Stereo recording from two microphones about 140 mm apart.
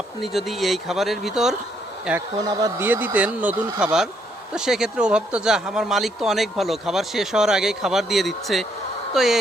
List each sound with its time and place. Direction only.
0.2 s speech: centre (ahead or behind)
2.4 s speech: 25° right (ahead or behind)
2.8 s speech: 15° right (ahead or behind)
4.5 s speech: 5° right (ahead or behind)